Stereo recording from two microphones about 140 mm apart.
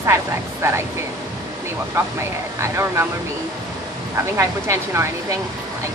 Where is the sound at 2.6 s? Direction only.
20° right (ahead or behind).